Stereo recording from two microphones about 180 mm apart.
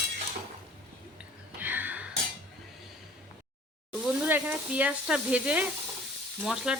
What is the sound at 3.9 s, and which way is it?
Sizzle, 5° right (ahead or behind).